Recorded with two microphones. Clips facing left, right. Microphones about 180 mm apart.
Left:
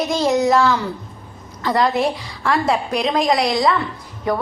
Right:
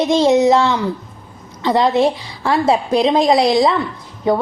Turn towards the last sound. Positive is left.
turn(degrees=-25)  # may be behind; listen again after turning